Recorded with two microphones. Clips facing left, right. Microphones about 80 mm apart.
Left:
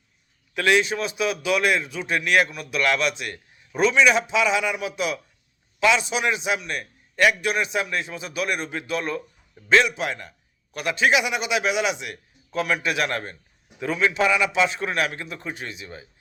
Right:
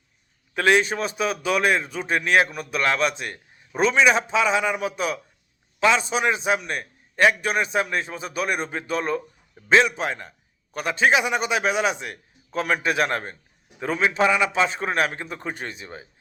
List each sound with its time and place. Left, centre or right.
0.5 s a man's voice: right